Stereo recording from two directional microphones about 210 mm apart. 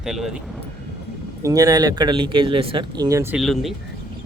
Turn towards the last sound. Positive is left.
turn(degrees=0)  # may be behind; listen again after turning